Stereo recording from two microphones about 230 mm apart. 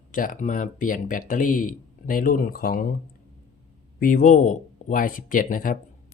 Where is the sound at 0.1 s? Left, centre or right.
Left.